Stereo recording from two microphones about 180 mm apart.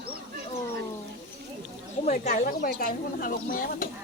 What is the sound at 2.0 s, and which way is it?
Speech, 40° left (ahead or behind).